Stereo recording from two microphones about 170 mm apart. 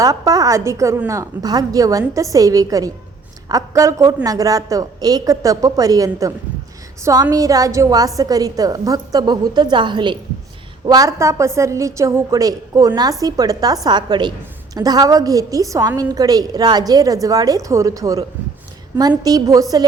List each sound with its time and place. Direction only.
0.0 s a woman's voice: 20° right (ahead or behind)